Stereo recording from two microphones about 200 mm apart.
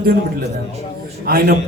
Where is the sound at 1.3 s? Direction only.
45° right (ahead or behind).